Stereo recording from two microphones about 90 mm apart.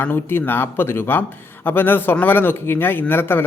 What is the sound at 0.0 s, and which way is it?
Speech, 25° left (ahead or behind).